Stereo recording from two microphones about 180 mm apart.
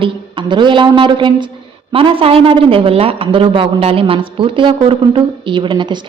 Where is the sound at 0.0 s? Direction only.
25° right (ahead or behind).